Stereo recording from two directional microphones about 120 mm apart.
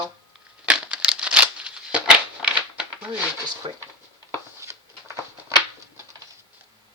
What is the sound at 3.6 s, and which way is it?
Speech, 45° right (ahead or behind).